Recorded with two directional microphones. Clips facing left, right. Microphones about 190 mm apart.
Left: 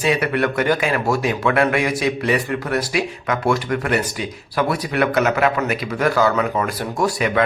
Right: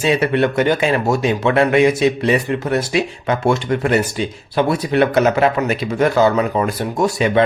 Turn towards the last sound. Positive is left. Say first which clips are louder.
# right 3 dB
turn(degrees=-25)  # may be behind; listen again after turning